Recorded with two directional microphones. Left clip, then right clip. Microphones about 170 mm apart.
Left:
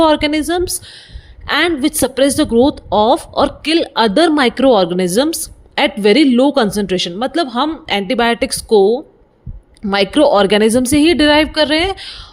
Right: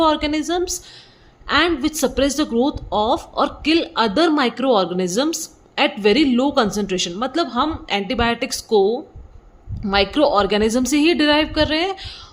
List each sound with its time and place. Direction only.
0.0 s a woman's voice: 35° left (ahead or behind)